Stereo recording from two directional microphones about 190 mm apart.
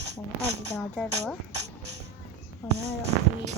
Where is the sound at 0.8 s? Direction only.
5° left (ahead or behind).